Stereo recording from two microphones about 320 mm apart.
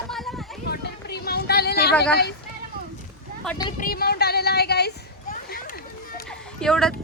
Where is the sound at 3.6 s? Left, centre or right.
Left.